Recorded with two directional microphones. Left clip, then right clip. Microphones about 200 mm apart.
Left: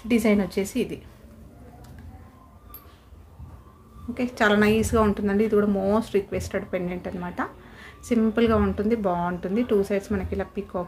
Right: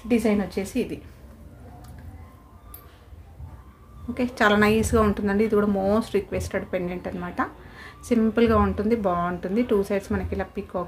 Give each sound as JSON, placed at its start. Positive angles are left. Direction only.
{"t": 0.1, "sound": "a woman's voice", "side_deg": 20}
{"t": 4.1, "sound": "a woman's voice", "side_deg": 0}